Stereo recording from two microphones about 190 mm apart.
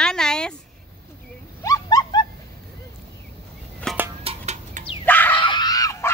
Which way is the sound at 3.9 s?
5° left (ahead or behind).